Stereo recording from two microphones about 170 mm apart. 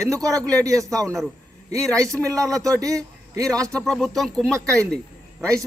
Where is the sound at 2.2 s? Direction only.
20° right (ahead or behind).